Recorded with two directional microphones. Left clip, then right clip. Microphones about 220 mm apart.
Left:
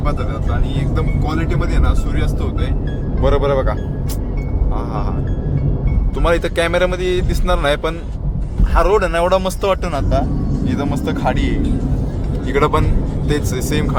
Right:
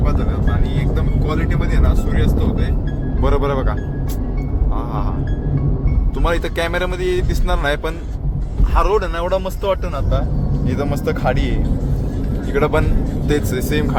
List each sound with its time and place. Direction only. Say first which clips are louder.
3.2 s speech: left 4 dB; 5° left (ahead or behind)
6.2 s speech: left 4 dB; 5° left (ahead or behind)
10.7 s speech: right 1 dB; centre (ahead or behind)